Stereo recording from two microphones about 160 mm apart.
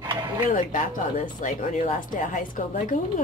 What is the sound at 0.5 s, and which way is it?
Speech, 55° left (ahead or behind).